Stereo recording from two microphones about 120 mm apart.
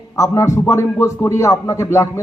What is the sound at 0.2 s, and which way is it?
A man's voice, 25° left (ahead or behind).